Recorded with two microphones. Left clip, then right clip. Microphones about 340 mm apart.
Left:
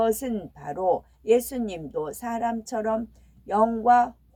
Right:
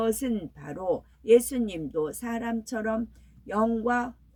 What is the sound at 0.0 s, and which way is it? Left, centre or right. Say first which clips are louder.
Speech: left 4 dB; centre.